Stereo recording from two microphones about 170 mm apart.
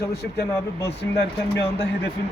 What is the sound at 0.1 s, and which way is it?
Speech, 75° left (ahead or behind).